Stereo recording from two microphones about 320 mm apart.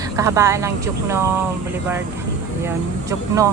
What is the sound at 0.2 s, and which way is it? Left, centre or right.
Speech, centre.